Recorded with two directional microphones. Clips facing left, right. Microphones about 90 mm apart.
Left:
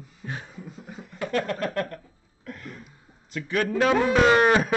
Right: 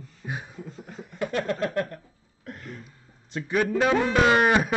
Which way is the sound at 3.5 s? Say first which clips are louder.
Even; 15° right (ahead or behind).